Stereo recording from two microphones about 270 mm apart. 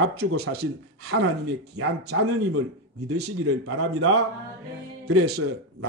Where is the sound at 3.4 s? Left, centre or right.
Right.